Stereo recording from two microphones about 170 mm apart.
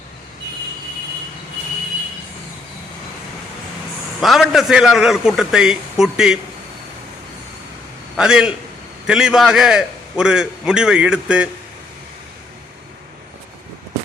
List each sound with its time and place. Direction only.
4.2 s a man's voice: centre (ahead or behind)
8.1 s a man's voice: 5° right (ahead or behind)